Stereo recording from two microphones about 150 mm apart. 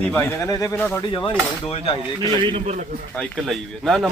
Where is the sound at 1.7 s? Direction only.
40° left (ahead or behind).